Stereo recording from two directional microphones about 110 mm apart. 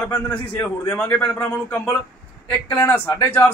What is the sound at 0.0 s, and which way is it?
A man's voice, 15° left (ahead or behind).